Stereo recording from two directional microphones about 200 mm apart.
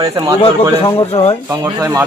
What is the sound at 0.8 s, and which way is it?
Speech, 30° left (ahead or behind).